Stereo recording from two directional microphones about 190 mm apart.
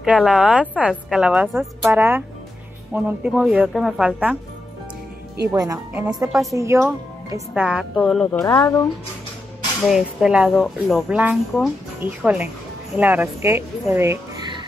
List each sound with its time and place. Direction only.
0.0 s a woman's voice: 5° right (ahead or behind)
5.5 s a woman's voice: 15° right (ahead or behind)
7.6 s a woman's voice: 5° right (ahead or behind)
8.3 s speech: 15° left (ahead or behind)
9.8 s a woman's voice: 5° right (ahead or behind)